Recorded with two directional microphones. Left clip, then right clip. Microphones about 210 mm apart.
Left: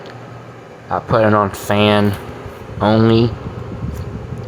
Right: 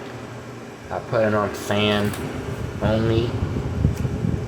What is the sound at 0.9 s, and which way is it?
Speech, 25° left (ahead or behind).